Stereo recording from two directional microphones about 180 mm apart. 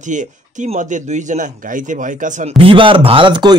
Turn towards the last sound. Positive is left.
turn(degrees=-25)  # may be behind; listen again after turning